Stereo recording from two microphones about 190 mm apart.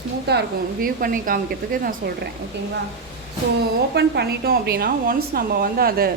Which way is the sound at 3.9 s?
60° right (ahead or behind).